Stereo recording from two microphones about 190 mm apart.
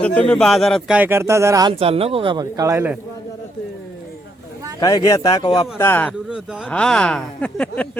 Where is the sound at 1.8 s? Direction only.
30° right (ahead or behind); by 2.9 s 15° right (ahead or behind).